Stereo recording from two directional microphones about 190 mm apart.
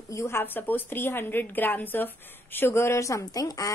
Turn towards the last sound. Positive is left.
turn(degrees=20)  # may be behind; listen again after turning